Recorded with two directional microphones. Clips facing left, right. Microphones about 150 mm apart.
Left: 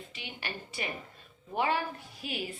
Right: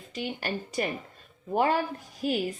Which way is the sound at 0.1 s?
45° right (ahead or behind).